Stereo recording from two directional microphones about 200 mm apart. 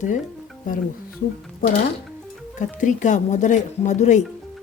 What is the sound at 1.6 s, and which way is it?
Speech, 45° left (ahead or behind).